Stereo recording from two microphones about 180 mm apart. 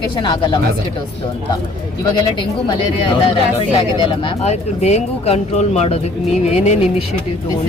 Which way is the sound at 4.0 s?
25° left (ahead or behind).